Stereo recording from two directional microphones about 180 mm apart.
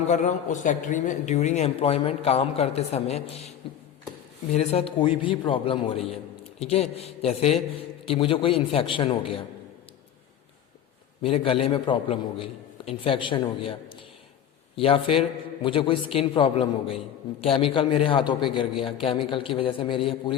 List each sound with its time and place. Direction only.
0.1 s speech: 40° left (ahead or behind)
4.5 s speech: 35° left (ahead or behind)
11.2 s a man's voice: 30° left (ahead or behind)